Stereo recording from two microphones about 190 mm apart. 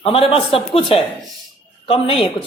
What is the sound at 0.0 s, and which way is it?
Speech, 30° left (ahead or behind).